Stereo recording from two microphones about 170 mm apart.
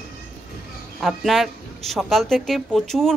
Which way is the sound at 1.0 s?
Centre (ahead or behind).